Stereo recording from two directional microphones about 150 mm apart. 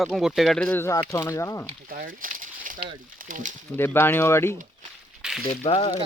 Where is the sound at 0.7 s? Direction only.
20° left (ahead or behind).